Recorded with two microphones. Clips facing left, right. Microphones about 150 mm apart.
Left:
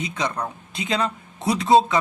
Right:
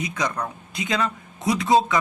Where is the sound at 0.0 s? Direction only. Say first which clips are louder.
Even; 30° left (ahead or behind).